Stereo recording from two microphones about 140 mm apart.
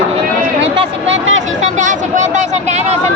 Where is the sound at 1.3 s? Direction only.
60° right (ahead or behind).